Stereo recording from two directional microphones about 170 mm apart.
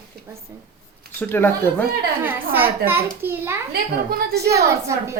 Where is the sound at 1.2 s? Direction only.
10° left (ahead or behind).